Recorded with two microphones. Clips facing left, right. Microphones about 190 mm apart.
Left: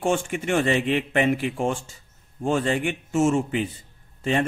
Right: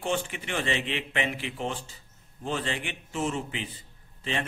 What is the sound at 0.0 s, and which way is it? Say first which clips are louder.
A man's voice: left 7 dB; 50° left (ahead or behind).